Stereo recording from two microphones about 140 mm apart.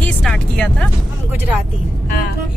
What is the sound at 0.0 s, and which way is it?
Speech, 5° left (ahead or behind).